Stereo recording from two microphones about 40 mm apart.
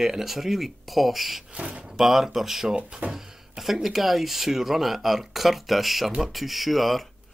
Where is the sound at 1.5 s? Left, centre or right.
Right.